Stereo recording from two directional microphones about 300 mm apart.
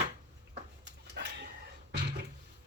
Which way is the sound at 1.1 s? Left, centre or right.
Right.